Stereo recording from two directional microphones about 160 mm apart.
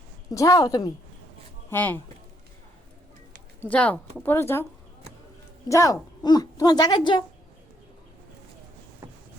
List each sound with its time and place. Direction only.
0.3 s a woman's voice: 20° left (ahead or behind)
1.7 s speech: 10° left (ahead or behind)
3.6 s speech: 10° left (ahead or behind)
5.6 s a woman's voice: 20° left (ahead or behind)